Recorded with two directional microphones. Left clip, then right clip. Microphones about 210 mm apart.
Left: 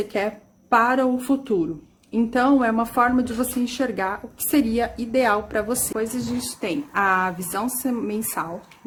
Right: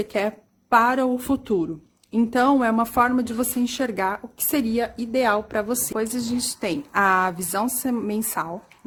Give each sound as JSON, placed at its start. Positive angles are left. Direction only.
{"t": 0.0, "sound": "a woman's voice", "side_deg": -40}